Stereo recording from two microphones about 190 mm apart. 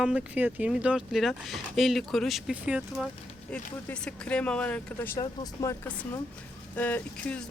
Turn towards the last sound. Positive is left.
turn(degrees=5)  # may be behind; listen again after turning